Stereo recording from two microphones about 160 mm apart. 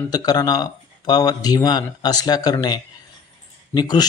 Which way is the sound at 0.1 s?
25° left (ahead or behind).